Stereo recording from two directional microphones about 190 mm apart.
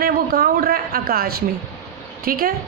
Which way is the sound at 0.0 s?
50° right (ahead or behind).